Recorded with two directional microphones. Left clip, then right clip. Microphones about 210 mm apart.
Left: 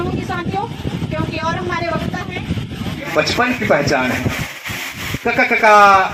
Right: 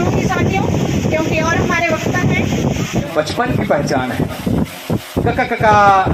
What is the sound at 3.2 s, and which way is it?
Speech, 40° left (ahead or behind).